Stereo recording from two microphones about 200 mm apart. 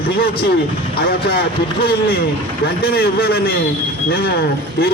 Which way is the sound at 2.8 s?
50° left (ahead or behind).